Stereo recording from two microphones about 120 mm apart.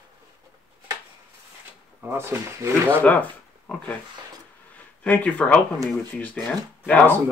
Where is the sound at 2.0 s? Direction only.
20° right (ahead or behind).